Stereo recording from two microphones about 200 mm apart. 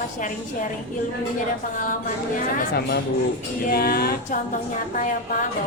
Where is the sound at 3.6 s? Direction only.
50° left (ahead or behind).